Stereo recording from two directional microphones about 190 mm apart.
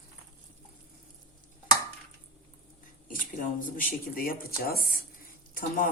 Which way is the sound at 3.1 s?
45° left (ahead or behind).